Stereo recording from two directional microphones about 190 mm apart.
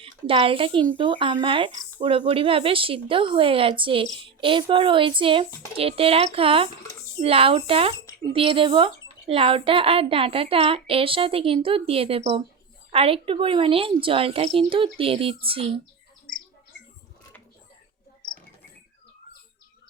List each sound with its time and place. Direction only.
0.0 s a woman's voice: 30° right (ahead or behind)